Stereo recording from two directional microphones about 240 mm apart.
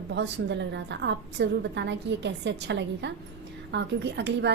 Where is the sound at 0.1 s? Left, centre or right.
Right.